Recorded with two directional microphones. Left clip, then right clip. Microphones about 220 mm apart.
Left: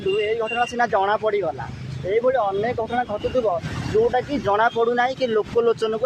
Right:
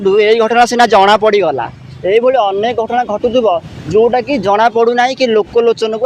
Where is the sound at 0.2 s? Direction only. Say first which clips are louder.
Right 13 dB; 45° right (ahead or behind).